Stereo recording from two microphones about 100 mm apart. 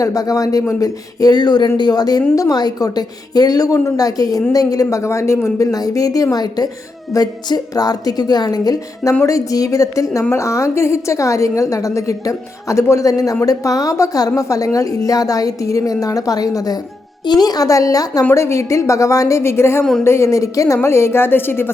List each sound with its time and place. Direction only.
0.0 s a woman's voice: 35° left (ahead or behind)